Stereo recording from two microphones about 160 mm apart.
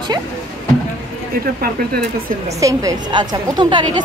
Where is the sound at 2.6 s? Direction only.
20° right (ahead or behind).